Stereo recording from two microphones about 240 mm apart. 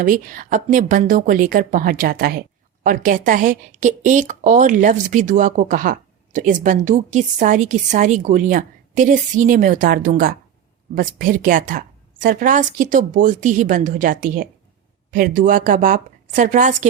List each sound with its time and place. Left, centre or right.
0.0 s a woman's voice: right